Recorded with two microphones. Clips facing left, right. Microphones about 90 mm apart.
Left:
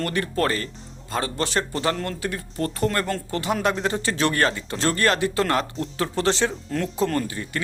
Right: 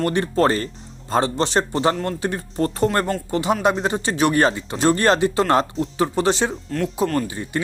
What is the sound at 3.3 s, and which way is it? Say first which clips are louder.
A man's voice: right 5 dB; 20° right (ahead or behind).